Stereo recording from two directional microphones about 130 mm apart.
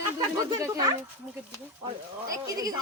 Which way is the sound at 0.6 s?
30° right (ahead or behind).